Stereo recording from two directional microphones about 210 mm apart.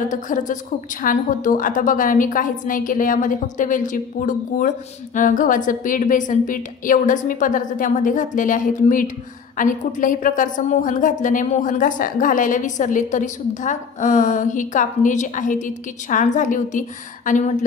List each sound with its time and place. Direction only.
0.1 s a woman's voice: 35° left (ahead or behind)